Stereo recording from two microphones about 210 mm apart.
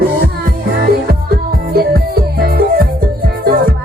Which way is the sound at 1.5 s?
45° right (ahead or behind).